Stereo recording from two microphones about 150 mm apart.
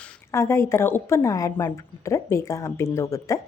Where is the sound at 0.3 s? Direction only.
20° left (ahead or behind).